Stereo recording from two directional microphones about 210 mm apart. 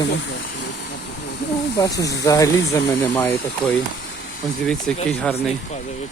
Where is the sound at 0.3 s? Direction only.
55° left (ahead or behind).